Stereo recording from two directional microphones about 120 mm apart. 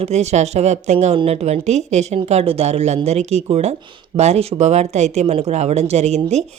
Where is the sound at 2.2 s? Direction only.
60° right (ahead or behind).